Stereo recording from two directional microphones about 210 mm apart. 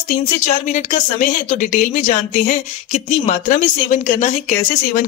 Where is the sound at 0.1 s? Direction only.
35° left (ahead or behind).